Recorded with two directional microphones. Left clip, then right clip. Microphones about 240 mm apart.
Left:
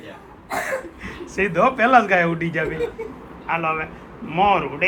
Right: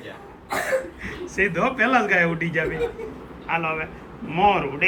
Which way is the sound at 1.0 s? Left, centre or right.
Centre.